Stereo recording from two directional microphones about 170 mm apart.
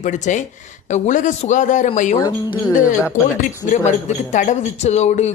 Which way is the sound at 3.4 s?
45° left (ahead or behind).